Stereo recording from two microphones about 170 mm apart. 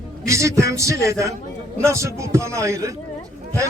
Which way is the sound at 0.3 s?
15° right (ahead or behind).